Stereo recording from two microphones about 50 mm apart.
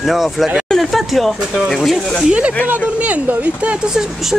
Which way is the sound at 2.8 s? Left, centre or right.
Right.